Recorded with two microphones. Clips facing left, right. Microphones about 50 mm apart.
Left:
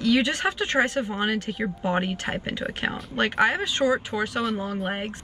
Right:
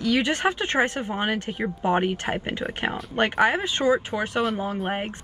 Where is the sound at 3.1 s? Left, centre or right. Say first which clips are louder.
Right 1 dB; right.